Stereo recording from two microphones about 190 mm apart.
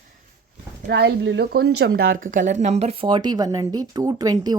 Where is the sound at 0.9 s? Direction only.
60° right (ahead or behind).